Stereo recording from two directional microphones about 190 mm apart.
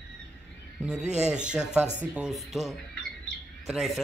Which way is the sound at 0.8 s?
5° right (ahead or behind).